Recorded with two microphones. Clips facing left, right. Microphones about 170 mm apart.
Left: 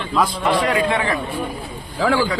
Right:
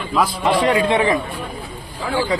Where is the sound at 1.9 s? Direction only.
90° left.